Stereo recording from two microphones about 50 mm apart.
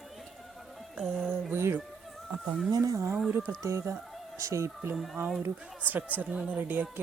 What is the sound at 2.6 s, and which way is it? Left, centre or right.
Speech, right.